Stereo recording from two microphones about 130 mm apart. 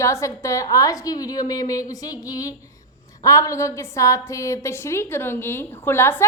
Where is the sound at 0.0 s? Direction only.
25° left (ahead or behind).